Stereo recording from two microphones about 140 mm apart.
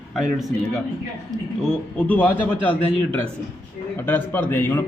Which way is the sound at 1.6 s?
5° left (ahead or behind).